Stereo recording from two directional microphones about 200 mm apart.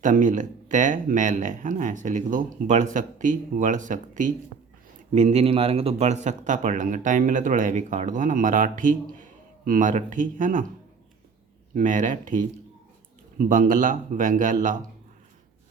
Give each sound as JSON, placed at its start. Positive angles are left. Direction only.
{"t": 0.0, "sound": "speech", "side_deg": -40}
{"t": 11.7, "sound": "speech", "side_deg": -40}